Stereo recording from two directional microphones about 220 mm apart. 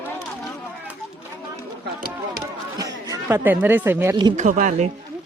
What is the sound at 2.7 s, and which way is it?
Speech, 15° right (ahead or behind).